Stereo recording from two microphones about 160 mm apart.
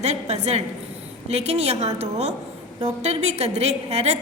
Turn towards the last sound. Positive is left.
turn(degrees=-40)  # may be behind; listen again after turning